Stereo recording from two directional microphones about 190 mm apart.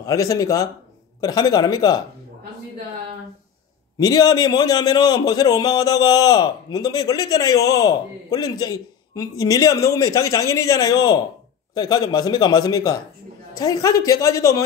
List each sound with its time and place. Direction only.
0.0 s a man's voice: 15° left (ahead or behind)
4.0 s a man's voice: 20° left (ahead or behind)